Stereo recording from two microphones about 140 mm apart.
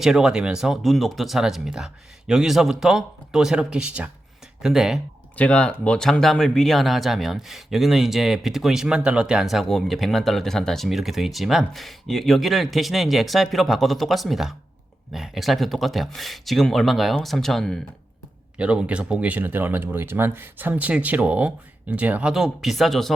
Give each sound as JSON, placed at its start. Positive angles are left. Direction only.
{"t": 0.0, "sound": "speech", "side_deg": -5}
{"t": 5.4, "sound": "speech", "side_deg": 10}